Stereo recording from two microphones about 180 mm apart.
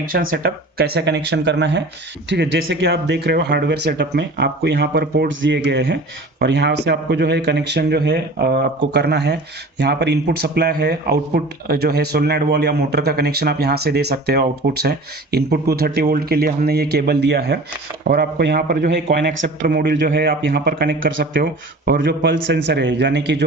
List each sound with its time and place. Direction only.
0.0 s speech: 50° right (ahead or behind)
19.1 s speech: 75° right (ahead or behind)
19.4 s a man's voice: 50° right (ahead or behind)
22.0 s speech: 80° right